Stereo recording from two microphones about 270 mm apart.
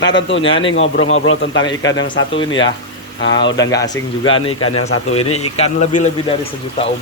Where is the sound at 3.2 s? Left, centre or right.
Left.